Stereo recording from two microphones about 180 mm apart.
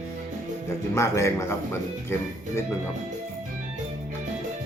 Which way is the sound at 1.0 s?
15° left (ahead or behind).